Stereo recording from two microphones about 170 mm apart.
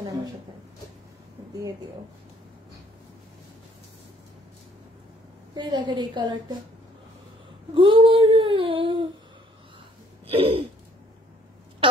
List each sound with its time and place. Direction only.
5.5 s a woman's voice: 25° right (ahead or behind)
7.7 s child singing: 30° right (ahead or behind)
10.2 s a sound: 35° right (ahead or behind)